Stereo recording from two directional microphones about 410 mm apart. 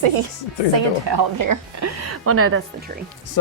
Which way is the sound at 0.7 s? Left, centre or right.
Right.